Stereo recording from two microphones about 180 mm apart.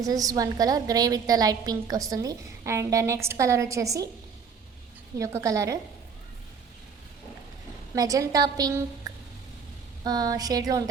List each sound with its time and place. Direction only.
0.0 s a woman's voice: 20° right (ahead or behind)
5.1 s a woman's voice: 15° right (ahead or behind)
7.9 s a woman's voice: 20° right (ahead or behind)